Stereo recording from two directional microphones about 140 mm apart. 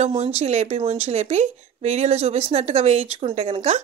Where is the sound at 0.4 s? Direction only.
50° right (ahead or behind).